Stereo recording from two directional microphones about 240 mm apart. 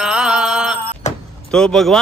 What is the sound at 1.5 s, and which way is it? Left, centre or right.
Speech, centre.